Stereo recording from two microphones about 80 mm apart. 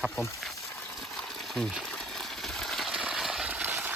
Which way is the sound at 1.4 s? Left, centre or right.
Centre.